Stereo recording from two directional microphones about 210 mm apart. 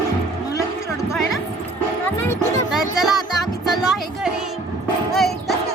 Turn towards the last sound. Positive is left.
turn(degrees=0)  # may be behind; listen again after turning